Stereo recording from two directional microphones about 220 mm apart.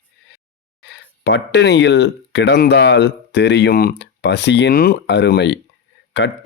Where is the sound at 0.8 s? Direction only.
50° left (ahead or behind).